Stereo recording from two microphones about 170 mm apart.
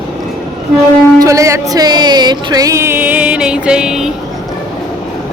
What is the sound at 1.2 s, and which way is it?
Music, 20° right (ahead or behind).